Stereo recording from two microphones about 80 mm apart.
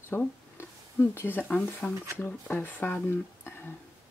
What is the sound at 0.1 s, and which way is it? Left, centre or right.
Speech, left.